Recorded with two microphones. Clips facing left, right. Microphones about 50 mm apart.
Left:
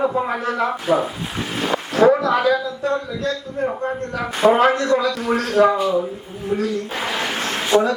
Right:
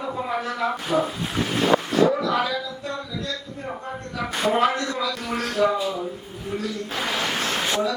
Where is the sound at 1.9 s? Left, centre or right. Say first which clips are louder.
Left 5 dB; left.